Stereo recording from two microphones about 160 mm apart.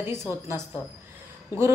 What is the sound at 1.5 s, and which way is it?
Speech, 15° right (ahead or behind).